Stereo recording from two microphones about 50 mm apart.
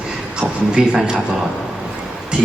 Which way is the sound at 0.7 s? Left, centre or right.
Centre.